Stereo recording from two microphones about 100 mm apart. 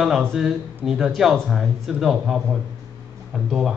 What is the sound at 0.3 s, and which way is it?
Speech, centre (ahead or behind).